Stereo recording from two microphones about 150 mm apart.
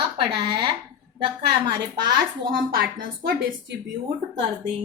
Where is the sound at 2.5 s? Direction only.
70° right (ahead or behind).